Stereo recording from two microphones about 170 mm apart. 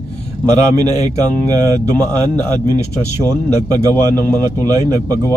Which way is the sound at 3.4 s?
10° left (ahead or behind).